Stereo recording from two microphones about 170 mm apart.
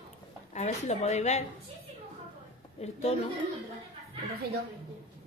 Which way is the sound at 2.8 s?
40° left (ahead or behind).